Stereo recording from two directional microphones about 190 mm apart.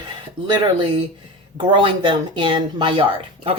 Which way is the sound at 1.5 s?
25° right (ahead or behind).